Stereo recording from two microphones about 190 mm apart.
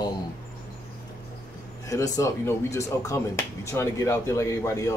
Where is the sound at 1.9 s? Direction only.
20° left (ahead or behind).